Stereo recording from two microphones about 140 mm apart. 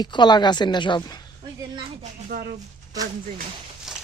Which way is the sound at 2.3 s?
80° right.